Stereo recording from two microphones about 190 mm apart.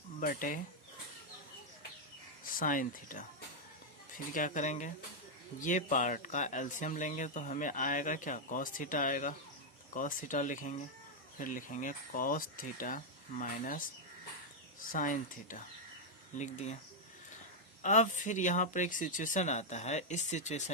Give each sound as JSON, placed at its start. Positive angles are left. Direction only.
{"t": 0.2, "sound": "speech", "side_deg": 45}
{"t": 2.4, "sound": "speech", "side_deg": 45}
{"t": 4.4, "sound": "speech", "side_deg": 40}
{"t": 14.9, "sound": "speech", "side_deg": 45}
{"t": 17.8, "sound": "speech", "side_deg": 40}